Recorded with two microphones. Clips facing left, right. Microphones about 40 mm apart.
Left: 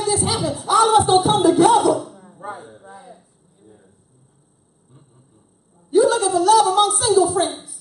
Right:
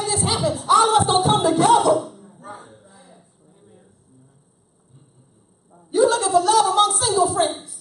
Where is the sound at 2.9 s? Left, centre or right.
Centre.